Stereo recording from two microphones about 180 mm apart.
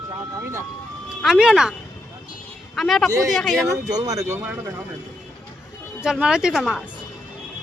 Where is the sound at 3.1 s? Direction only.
20° right (ahead or behind).